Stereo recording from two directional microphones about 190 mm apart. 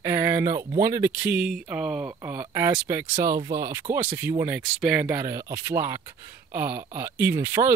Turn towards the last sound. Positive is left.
turn(degrees=-10)  # may be behind; listen again after turning